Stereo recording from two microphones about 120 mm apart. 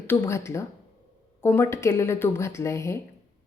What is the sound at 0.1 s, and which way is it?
A woman's voice, 25° left (ahead or behind).